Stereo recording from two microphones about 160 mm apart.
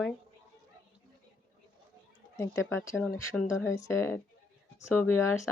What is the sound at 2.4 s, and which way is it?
Speech, 15° left (ahead or behind).